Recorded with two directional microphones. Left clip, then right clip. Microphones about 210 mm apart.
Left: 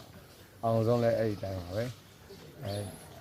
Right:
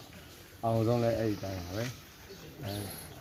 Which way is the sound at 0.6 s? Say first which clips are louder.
Left 2 dB; 10° left (ahead or behind).